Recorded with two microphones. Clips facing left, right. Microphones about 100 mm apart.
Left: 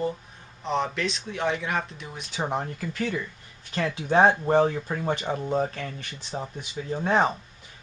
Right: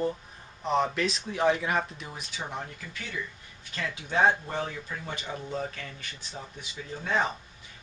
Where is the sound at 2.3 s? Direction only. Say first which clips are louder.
Left 10 dB; 40° left (ahead or behind).